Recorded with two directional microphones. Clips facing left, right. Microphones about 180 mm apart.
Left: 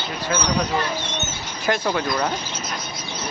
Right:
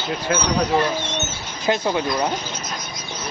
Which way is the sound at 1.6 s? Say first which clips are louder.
Right 2 dB; 20° right (ahead or behind).